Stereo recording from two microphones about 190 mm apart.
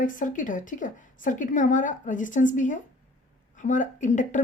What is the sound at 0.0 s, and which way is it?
A woman's voice, 45° left (ahead or behind).